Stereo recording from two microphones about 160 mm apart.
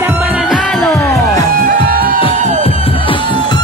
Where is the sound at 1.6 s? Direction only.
65° right (ahead or behind).